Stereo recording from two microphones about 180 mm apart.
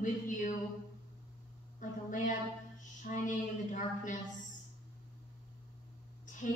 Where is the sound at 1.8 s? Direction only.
45° left (ahead or behind).